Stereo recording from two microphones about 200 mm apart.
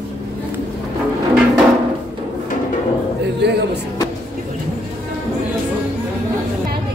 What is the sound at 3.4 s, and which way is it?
Speech, 55° right (ahead or behind).